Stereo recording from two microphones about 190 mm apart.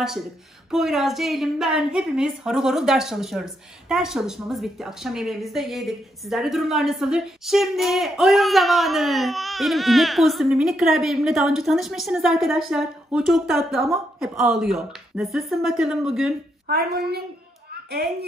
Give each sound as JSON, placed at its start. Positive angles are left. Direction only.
{"t": 0.7, "sound": "a woman's voice", "side_deg": 0}
{"t": 16.6, "sound": "a woman's voice", "side_deg": -55}